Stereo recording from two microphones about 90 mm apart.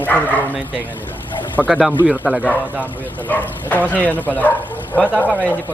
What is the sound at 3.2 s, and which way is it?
Speech, 20° left (ahead or behind).